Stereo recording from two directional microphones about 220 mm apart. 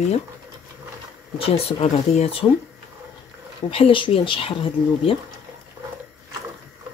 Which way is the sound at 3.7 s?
25° left (ahead or behind).